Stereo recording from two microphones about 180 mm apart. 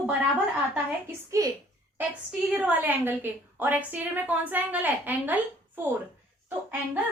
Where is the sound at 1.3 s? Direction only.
15° right (ahead or behind).